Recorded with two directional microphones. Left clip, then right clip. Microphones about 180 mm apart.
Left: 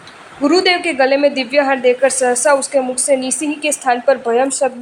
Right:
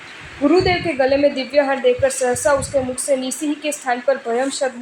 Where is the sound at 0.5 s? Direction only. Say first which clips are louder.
Left 4 dB; 25° left (ahead or behind).